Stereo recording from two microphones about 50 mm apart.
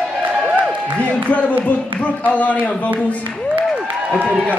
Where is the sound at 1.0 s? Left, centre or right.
Left.